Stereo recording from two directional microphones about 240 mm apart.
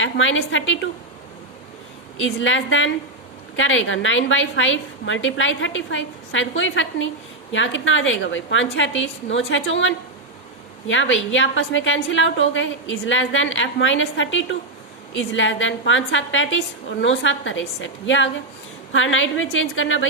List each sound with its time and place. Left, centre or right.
0.0 s a woman's voice: left
2.1 s a woman's voice: left